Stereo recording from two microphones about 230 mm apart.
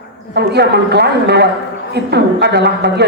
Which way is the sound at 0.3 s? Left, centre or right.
Right.